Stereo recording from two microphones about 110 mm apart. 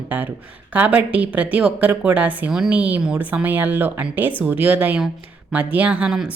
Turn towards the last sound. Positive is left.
turn(degrees=-5)  # may be behind; listen again after turning